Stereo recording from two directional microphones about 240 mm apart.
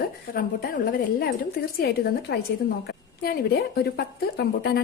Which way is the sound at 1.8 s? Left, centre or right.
Left.